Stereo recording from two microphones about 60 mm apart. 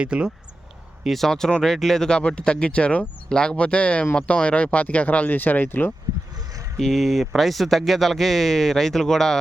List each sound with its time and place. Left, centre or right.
0.0 s speech: centre
1.0 s speech: centre; by 5.9 s left
6.3 s a sound: right
6.7 s speech: centre